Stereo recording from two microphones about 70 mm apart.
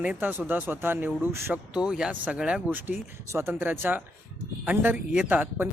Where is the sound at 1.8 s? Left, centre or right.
Centre.